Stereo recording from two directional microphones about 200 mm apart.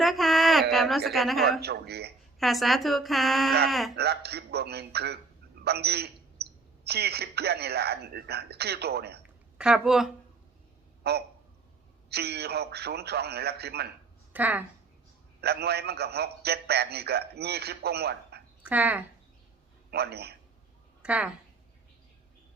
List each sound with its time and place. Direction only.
0.0 s a sound: centre (ahead or behind)
0.7 s a woman's voice: centre (ahead or behind)
1.6 s a man's voice: 55° right (ahead or behind)
2.4 s a woman's voice: centre (ahead or behind)
3.9 s a man's voice: 55° right (ahead or behind)
9.6 s a woman's voice: 5° right (ahead or behind)
11.1 s a man's voice: 55° right (ahead or behind)
14.3 s speech: 10° right (ahead or behind)
15.4 s a man's voice: 55° right (ahead or behind)
18.6 s speech: 10° right (ahead or behind)
19.9 s a man's voice: 55° right (ahead or behind)
21.0 s a woman's voice: 5° right (ahead or behind)